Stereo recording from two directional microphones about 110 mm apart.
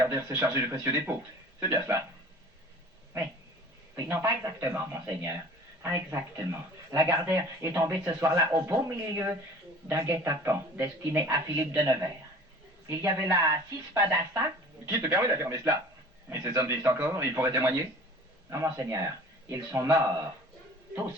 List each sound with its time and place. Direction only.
0.0 s speech: 25° right (ahead or behind)
4.1 s speech: 20° right (ahead or behind)